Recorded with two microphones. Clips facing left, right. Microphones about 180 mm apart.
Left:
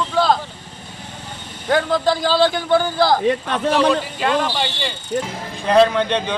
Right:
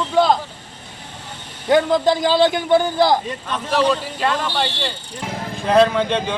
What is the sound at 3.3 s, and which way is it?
Speech, 65° left (ahead or behind).